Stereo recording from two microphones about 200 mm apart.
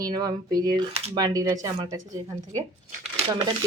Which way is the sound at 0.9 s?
30° right (ahead or behind).